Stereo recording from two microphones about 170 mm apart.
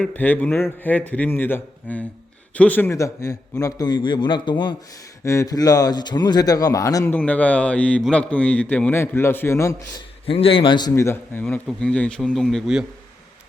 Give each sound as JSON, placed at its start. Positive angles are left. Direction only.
{"t": 0.0, "sound": "a man's voice", "side_deg": 10}
{"t": 5.2, "sound": "a man's voice", "side_deg": 15}
{"t": 10.2, "sound": "a man's voice", "side_deg": 35}